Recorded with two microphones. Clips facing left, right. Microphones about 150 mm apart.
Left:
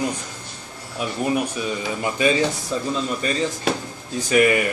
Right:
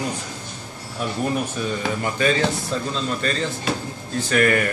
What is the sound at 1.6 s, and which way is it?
Speech, 10° left (ahead or behind).